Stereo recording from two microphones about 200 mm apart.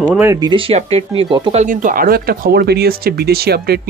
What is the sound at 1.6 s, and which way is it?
Speech, 40° right (ahead or behind).